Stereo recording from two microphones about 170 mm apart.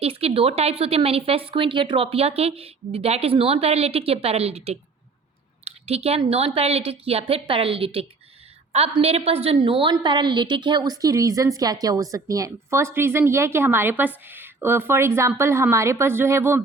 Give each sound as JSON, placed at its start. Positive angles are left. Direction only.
{"t": 0.0, "sound": "a woman's voice", "side_deg": -35}